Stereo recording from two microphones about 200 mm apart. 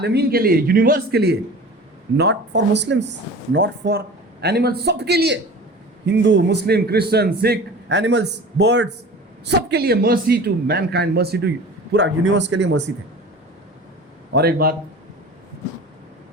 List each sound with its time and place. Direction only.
0.0 s a man's voice: 55° right (ahead or behind)
14.3 s a man's voice: 50° right (ahead or behind)